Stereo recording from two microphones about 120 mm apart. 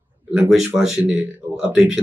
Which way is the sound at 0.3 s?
10° right (ahead or behind).